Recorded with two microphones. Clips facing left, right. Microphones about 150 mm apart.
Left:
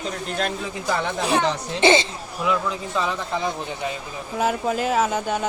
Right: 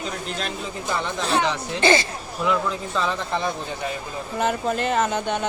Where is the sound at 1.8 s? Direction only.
20° left (ahead or behind).